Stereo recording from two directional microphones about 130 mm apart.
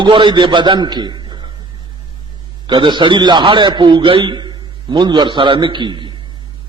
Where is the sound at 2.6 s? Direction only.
40° right (ahead or behind).